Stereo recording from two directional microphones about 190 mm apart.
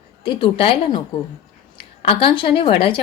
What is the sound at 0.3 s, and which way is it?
A woman's voice, 25° left (ahead or behind).